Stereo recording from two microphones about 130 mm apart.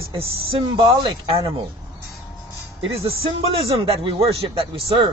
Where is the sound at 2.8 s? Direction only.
45° right (ahead or behind).